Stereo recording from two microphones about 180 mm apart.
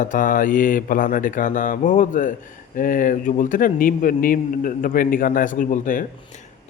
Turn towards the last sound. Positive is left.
turn(degrees=50)  # may be behind; listen again after turning